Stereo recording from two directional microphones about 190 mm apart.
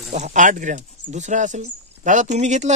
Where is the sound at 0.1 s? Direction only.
40° right (ahead or behind).